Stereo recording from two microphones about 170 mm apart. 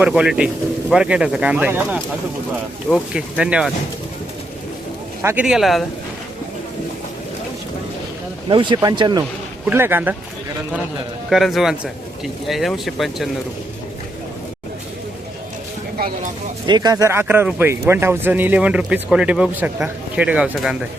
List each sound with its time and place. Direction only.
0.0 s speech: 5° right (ahead or behind)
5.2 s speech: 15° right (ahead or behind)
5.5 s speech: centre (ahead or behind)
8.4 s speech: 30° right (ahead or behind)
9.6 s speech: 10° right (ahead or behind)
11.3 s speech: centre (ahead or behind)
16.6 s speech: 25° right (ahead or behind); by 20.7 s 5° right (ahead or behind)